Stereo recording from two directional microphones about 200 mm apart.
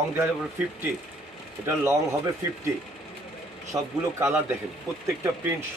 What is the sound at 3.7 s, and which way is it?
A man's voice, 15° right (ahead or behind).